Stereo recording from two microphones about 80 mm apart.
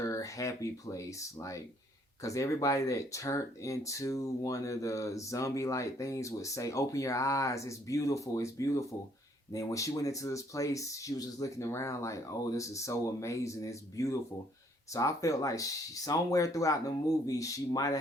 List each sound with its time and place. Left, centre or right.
0.0 s speech: left